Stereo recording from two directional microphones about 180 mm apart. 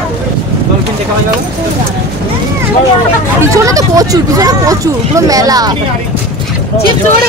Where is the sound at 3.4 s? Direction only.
15° right (ahead or behind).